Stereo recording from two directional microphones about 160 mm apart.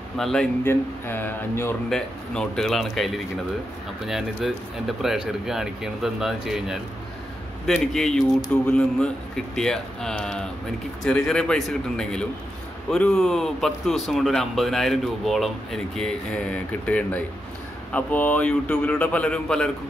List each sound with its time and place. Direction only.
0.2 s speech: 5° left (ahead or behind)
1.9 s speech: 5° left (ahead or behind)